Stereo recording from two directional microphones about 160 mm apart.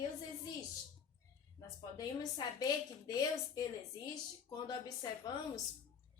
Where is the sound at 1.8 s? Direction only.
25° left (ahead or behind).